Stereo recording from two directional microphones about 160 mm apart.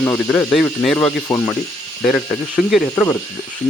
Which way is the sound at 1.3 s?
15° left (ahead or behind).